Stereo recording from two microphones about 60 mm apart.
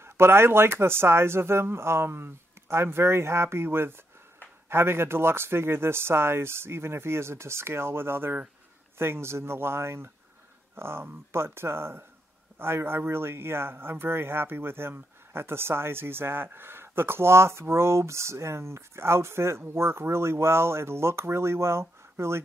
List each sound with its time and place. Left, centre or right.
0.0 s speech: right